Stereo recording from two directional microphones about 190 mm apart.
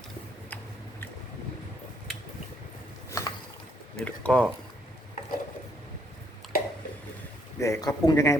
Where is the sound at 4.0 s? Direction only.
5° left (ahead or behind).